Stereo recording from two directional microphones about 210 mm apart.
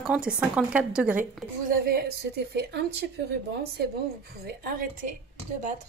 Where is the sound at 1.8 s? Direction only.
45° right (ahead or behind).